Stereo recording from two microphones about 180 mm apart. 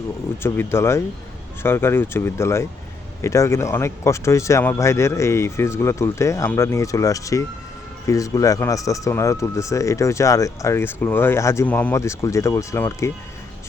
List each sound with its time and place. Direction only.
0.4 s speech: 15° left (ahead or behind)